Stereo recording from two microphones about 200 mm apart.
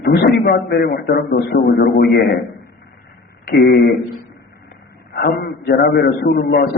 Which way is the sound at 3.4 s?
55° left (ahead or behind).